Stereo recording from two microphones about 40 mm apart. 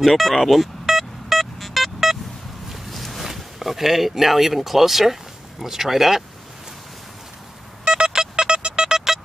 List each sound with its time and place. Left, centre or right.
0.0 s music: centre
2.7 s a sound: centre
3.3 s speech: centre
7.8 s squeak: right
8.9 s music: centre